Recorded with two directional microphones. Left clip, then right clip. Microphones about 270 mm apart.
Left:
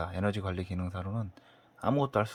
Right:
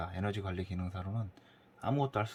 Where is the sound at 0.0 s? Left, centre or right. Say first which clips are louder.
Left 5 dB; centre.